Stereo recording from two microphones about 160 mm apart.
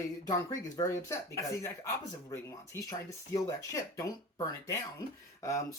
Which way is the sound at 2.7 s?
15° left (ahead or behind).